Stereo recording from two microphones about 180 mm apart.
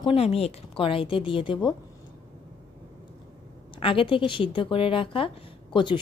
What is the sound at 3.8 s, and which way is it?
A woman's voice, 30° left (ahead or behind).